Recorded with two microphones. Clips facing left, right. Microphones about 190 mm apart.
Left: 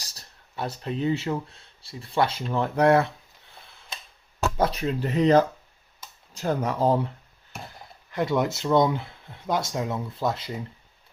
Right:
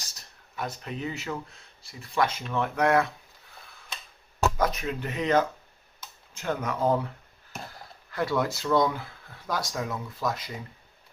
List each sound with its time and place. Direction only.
0.1 s speech: 30° left (ahead or behind)
4.5 s speech: 30° left (ahead or behind)
8.1 s speech: 20° left (ahead or behind)